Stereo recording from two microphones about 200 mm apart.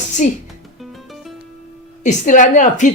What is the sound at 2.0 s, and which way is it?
Speech, 40° left (ahead or behind).